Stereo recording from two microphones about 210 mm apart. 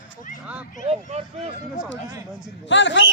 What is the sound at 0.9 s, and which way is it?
Speech, 30° right (ahead or behind).